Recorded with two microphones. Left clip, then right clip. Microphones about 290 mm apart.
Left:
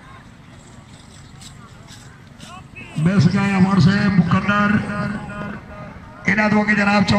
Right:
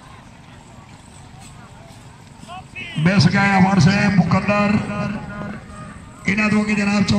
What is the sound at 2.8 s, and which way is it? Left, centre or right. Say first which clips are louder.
A man's voice: right 2 dB; right.